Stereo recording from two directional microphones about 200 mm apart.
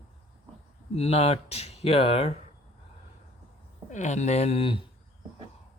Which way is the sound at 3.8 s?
35° left (ahead or behind).